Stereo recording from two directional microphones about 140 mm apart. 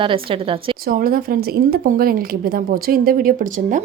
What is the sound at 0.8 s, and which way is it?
Speech, 90° right.